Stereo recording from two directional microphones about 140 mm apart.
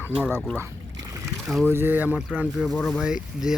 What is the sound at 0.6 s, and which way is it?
Boat, 25° right (ahead or behind).